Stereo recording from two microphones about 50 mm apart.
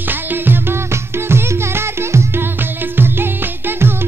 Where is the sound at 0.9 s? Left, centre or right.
Right.